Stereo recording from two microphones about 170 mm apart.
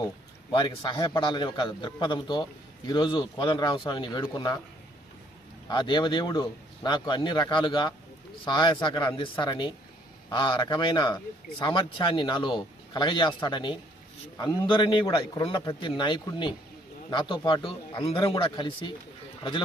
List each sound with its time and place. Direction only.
0.5 s a man's voice: 30° left (ahead or behind)
5.6 s a man's voice: 25° left (ahead or behind)